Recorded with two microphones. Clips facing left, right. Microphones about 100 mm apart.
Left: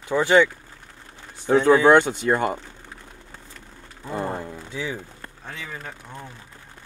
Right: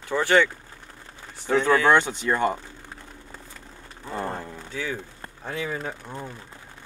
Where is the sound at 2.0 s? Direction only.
50° left (ahead or behind).